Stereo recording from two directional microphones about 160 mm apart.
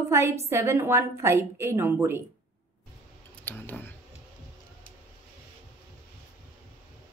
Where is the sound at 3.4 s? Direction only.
10° left (ahead or behind).